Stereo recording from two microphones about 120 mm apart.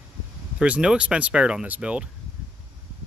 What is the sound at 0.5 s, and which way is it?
Speech, 10° right (ahead or behind).